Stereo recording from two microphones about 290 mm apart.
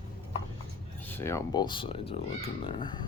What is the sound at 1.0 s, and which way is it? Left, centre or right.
Speech, centre.